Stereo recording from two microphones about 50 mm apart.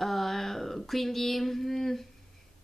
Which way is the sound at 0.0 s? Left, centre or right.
Centre.